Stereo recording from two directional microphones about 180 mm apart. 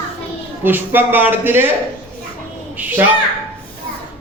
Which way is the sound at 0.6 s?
10° right (ahead or behind).